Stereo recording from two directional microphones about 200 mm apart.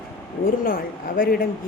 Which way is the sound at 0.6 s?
45° left (ahead or behind).